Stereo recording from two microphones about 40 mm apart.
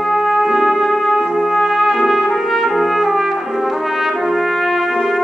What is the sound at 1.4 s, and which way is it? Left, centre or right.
Trumpet, centre.